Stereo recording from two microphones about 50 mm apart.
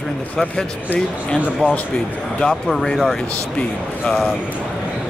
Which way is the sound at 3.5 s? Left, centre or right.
Centre.